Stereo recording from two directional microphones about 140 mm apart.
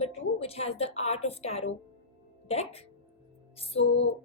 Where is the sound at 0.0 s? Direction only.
45° left (ahead or behind).